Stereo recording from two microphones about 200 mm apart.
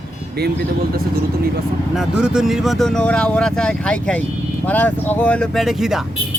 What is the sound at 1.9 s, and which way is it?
Speech, 5° right (ahead or behind).